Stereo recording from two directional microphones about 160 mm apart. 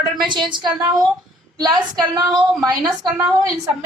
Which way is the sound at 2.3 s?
Centre (ahead or behind).